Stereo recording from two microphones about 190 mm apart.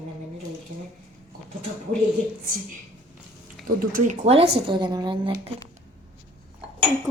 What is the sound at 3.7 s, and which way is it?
Speech, 45° right (ahead or behind).